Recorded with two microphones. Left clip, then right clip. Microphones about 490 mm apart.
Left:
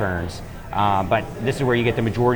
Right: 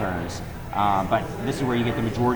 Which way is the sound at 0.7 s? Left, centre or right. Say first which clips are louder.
Left 2 dB; left.